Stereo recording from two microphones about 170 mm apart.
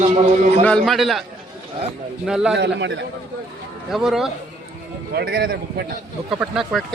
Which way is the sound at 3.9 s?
Centre (ahead or behind).